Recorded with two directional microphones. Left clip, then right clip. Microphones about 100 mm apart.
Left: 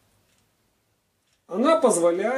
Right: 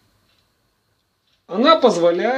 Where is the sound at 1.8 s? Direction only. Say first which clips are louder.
Right 5 dB; 20° right (ahead or behind).